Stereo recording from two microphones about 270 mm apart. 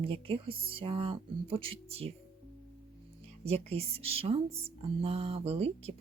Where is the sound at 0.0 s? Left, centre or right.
Centre.